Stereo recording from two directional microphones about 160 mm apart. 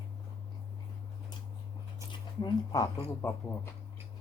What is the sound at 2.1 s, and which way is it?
Speech, 25° left (ahead or behind).